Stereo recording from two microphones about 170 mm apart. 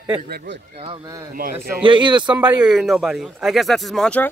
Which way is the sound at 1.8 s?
30° right (ahead or behind).